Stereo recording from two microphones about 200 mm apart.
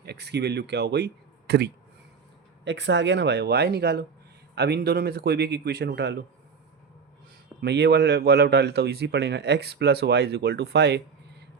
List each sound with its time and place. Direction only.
0.0 s a man's voice: 55° right (ahead or behind)
7.6 s a man's voice: 55° right (ahead or behind)